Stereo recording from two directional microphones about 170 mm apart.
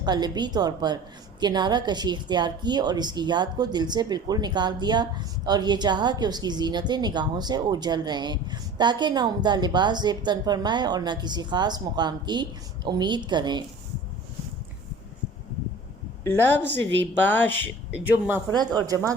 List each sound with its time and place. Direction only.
0.0 s a woman's voice: 25° right (ahead or behind)
16.2 s a woman's voice: 10° left (ahead or behind)
17.9 s speech: 10° right (ahead or behind)
18.5 s a woman's voice: 25° right (ahead or behind)